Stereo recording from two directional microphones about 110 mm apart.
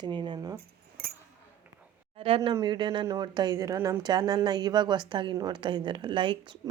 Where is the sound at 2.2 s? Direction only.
55° right (ahead or behind).